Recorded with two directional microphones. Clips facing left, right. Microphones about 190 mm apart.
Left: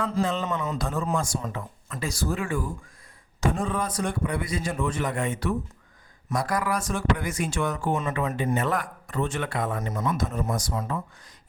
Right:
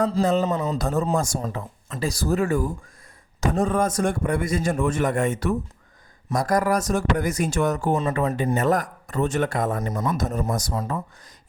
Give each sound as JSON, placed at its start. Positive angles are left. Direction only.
{"t": 0.0, "sound": "a man's voice", "side_deg": -40}